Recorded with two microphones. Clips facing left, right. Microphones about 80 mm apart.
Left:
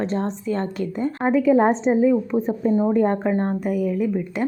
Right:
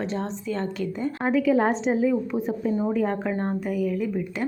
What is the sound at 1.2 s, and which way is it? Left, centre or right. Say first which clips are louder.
Speech: left 4 dB; left.